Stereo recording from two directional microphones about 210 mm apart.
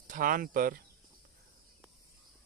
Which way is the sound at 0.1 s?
40° right (ahead or behind).